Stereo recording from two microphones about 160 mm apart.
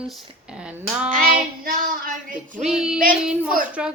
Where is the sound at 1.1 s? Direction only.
65° right (ahead or behind).